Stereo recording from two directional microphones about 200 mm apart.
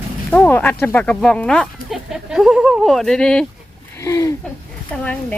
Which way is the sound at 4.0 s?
15° left (ahead or behind).